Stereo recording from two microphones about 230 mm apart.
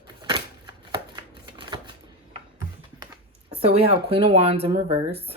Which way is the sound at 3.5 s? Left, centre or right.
Right.